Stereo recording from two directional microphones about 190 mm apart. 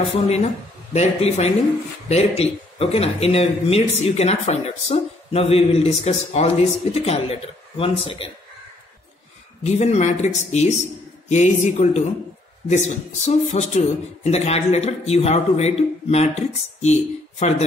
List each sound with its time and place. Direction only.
0.9 s speech: 35° left (ahead or behind)
9.6 s speech: 35° left (ahead or behind)